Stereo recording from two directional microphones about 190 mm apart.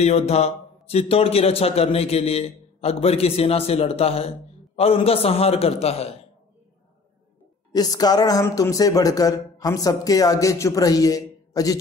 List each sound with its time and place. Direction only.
0.0 s a man's voice: 35° left (ahead or behind)
7.7 s speech: 20° left (ahead or behind)